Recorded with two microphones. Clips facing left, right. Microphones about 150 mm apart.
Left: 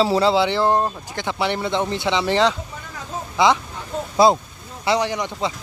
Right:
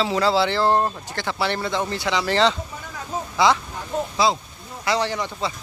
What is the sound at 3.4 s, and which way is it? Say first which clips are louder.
Speech: left 1 dB; 20° left (ahead or behind).